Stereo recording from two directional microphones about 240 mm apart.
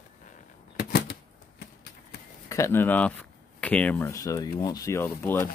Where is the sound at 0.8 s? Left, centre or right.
Left.